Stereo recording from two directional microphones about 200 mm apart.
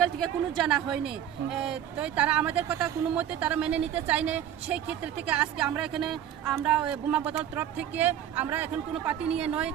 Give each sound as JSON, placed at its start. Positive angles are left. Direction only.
{"t": 0.0, "sound": "speech", "side_deg": 5}